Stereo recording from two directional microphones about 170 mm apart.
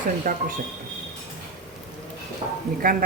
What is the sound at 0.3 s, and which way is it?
Speech, 45° right (ahead or behind).